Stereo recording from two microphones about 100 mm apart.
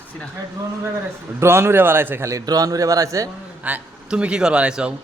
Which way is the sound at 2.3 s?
35° right (ahead or behind).